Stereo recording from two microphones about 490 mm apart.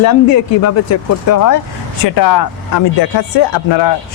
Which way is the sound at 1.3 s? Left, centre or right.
Left.